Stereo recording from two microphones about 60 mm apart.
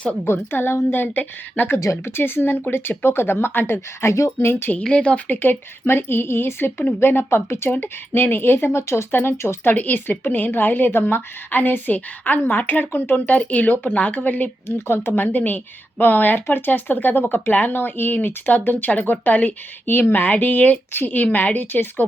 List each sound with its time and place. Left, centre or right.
0.3 s a woman's voice: left
1.8 s speech: left
2.1 s a woman's voice: left
4.0 s speech: left
4.8 s a woman's voice: centre
5.3 s a woman's voice: left
7.7 s a woman's voice: left
9.7 s a woman's voice: left
14.8 s a woman's voice: left